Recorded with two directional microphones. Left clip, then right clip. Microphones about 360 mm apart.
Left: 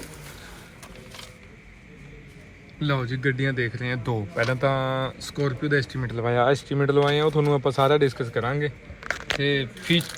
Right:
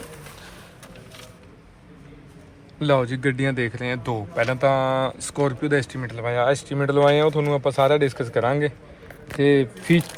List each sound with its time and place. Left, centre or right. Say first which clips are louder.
2.8 s speech: right 6 dB; centre
3.8 s speech: right 2 dB; centre
9.4 s speech: right 12 dB; centre